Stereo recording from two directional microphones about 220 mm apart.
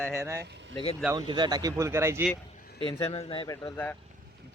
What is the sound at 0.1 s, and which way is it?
Speech, 15° right (ahead or behind).